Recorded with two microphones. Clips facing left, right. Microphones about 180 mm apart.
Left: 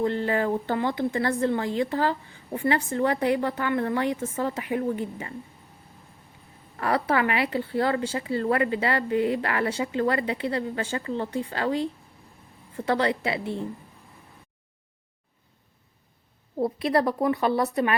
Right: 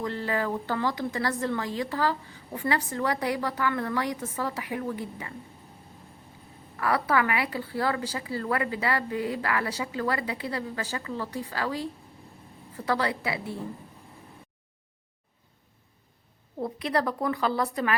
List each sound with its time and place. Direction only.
0.0 s speech: 30° left (ahead or behind)
6.7 s speech: 25° left (ahead or behind)
16.6 s speech: 25° left (ahead or behind)